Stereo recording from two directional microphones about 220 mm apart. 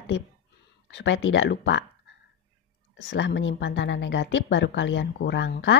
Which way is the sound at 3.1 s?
55° left (ahead or behind).